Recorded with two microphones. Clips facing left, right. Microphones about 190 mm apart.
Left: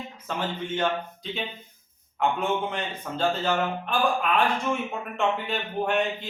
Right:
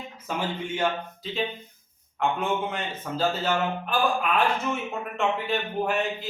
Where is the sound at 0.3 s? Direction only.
10° right (ahead or behind).